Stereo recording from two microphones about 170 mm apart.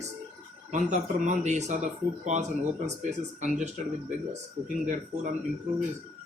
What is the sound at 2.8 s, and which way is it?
Speech, 45° right (ahead or behind).